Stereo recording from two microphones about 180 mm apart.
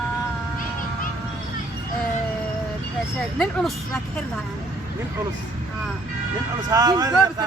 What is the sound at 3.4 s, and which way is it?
Speech, 5° left (ahead or behind).